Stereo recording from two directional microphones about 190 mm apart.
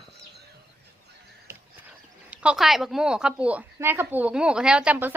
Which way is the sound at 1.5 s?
5° right (ahead or behind).